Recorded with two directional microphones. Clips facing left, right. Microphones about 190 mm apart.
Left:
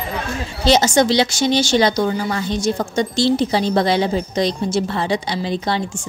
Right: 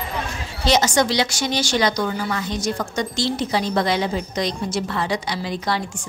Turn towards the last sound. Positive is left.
turn(degrees=25)  # may be behind; listen again after turning